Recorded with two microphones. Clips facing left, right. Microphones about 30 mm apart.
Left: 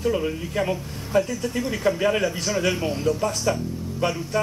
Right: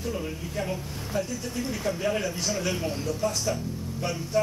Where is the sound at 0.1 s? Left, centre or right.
Left.